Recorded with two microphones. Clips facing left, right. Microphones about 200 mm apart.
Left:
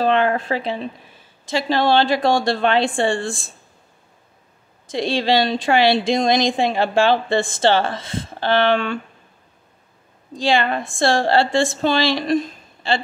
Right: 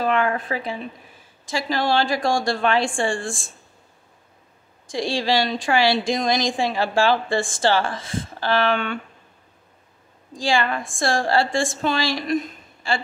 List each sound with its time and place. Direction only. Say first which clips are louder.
0.0 s a woman's voice: left 4 dB; 30° left (ahead or behind)
3.1 s a woman's voice: left 4 dB; 65° left (ahead or behind)
4.8 s a woman's voice: left 3 dB; 20° left (ahead or behind)
10.3 s a woman's voice: left 3 dB; 20° left (ahead or behind)
12.4 s a sound: left 3 dB; 25° left (ahead or behind)